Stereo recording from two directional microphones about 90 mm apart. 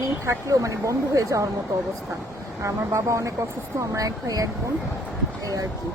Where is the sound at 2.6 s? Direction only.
35° right (ahead or behind).